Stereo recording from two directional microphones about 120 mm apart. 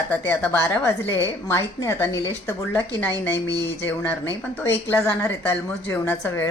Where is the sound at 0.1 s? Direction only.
15° left (ahead or behind).